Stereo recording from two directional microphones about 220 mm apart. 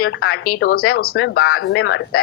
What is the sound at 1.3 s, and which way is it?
Speech, 75° left (ahead or behind).